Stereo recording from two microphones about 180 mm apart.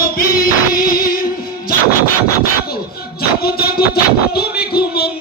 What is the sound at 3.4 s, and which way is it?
Music, 60° left (ahead or behind).